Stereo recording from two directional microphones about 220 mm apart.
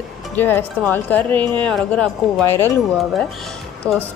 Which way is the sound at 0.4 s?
10° left (ahead or behind).